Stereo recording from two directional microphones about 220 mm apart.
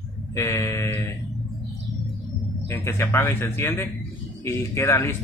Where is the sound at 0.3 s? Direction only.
15° left (ahead or behind).